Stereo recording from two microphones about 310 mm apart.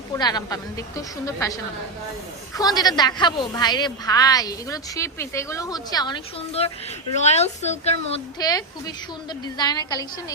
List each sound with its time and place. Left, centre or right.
0.1 s a woman's voice: centre
2.6 s a woman's voice: centre